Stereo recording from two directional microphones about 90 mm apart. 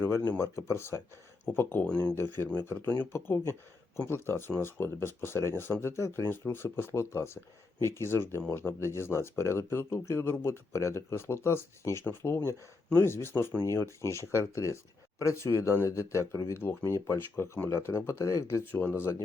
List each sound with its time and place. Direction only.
0.3 s speech: 30° left (ahead or behind)
18.6 s speech: 20° left (ahead or behind)